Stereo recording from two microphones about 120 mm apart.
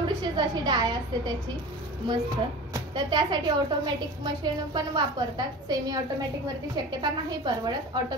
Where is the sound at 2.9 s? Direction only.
40° right (ahead or behind).